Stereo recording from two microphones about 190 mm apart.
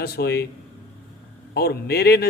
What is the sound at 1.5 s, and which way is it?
Speech, 55° left (ahead or behind).